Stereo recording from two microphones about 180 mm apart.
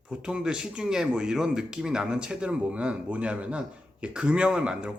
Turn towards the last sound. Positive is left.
turn(degrees=-5)  # may be behind; listen again after turning